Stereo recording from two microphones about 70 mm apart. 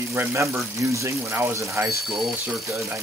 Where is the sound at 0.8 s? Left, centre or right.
Right.